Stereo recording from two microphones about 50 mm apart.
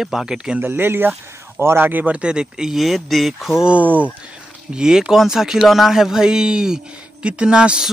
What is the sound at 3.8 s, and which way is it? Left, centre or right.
Speech, right.